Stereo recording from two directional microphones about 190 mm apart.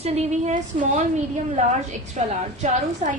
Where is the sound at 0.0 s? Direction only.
35° right (ahead or behind).